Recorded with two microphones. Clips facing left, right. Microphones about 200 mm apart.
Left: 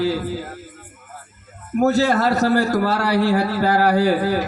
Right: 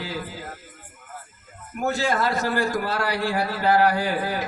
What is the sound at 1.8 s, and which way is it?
A man's voice, 40° left (ahead or behind).